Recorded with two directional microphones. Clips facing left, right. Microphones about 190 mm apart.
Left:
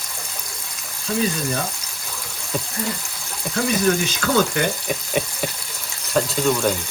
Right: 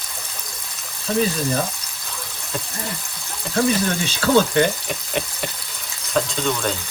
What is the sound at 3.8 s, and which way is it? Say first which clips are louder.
Speech: left 2 dB; 35° right (ahead or behind).